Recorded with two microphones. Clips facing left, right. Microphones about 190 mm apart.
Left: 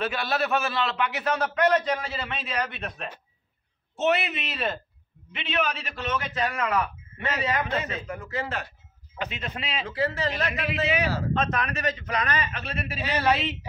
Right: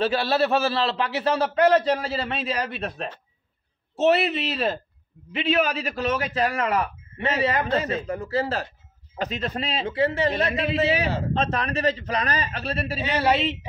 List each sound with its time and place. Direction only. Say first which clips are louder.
0.0 s a man's voice: right 6 dB; 30° right (ahead or behind)